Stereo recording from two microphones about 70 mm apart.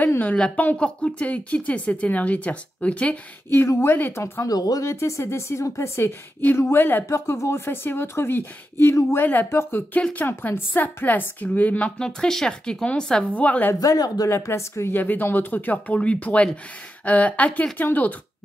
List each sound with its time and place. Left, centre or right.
0.2 s speech: left
3.4 s speech: left
4.5 s speech: left
4.8 s speech: left
6.5 s speech: left
7.1 s speech: left
9.9 s speech: left
12.0 s speech: centre
13.2 s speech: left
13.7 s speech: left
14.3 s speech: left
15.0 s speech: left